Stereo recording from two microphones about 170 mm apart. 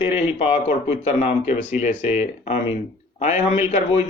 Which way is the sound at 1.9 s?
10° right (ahead or behind).